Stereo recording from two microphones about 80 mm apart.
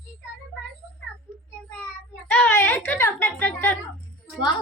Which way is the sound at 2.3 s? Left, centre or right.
Left.